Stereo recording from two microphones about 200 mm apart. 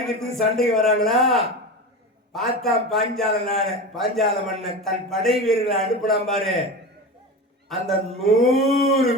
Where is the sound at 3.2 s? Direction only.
30° right (ahead or behind).